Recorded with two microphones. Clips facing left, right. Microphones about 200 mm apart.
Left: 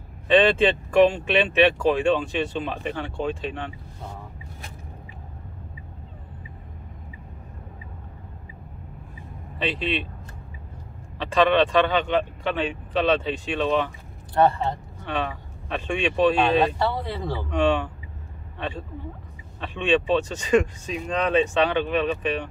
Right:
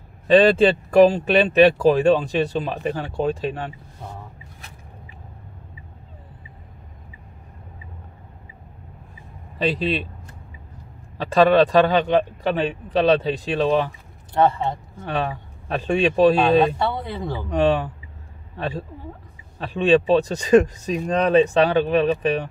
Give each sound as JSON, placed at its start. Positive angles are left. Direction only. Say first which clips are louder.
{"t": 0.3, "sound": "speech", "louder": "right 4 dB", "side_deg": -40}
{"t": 9.6, "sound": "speech", "louder": "right 4 dB", "side_deg": -40}
{"t": 11.1, "sound": "speech", "louder": "right 4 dB", "side_deg": -40}
{"t": 15.0, "sound": "speech", "louder": "right 3 dB", "side_deg": -40}
{"t": 17.5, "sound": "speech", "louder": "right 3 dB", "side_deg": -35}